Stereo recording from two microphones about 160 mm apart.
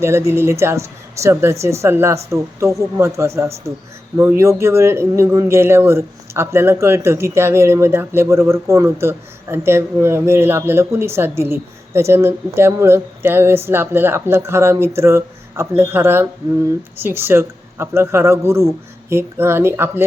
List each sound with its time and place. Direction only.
0.0 s a man's voice: 15° right (ahead or behind)